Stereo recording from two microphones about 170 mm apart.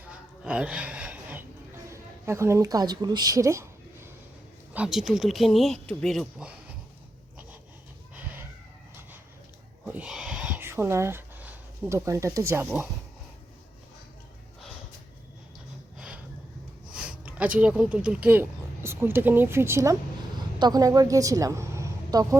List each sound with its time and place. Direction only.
0.0 s a sound: 5° right (ahead or behind)
1.9 s speech: 15° right (ahead or behind)
4.7 s speech: 5° right (ahead or behind)
8.1 s chicken: 10° right (ahead or behind)
9.8 s owl: 10° right (ahead or behind)
16.0 s a sound: 5° right (ahead or behind)
16.9 s a woman's voice: 5° right (ahead or behind)